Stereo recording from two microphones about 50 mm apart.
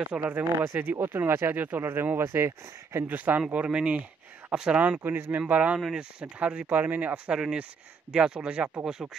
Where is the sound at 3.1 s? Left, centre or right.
Right.